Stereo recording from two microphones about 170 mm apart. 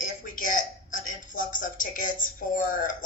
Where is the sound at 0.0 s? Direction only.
50° left (ahead or behind).